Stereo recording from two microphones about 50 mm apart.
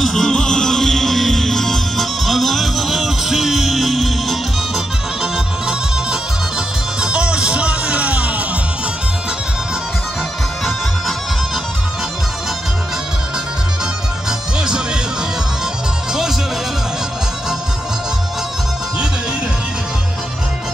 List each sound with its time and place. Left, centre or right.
0.0 s music: centre; by 8.4 s right
16.1 s music: centre